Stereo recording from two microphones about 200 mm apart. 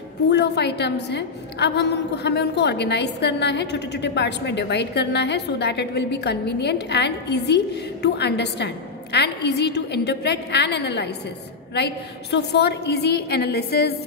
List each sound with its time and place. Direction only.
0.3 s a woman's voice: 55° left (ahead or behind)